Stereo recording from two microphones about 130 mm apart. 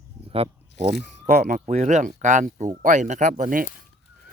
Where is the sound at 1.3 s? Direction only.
70° right (ahead or behind).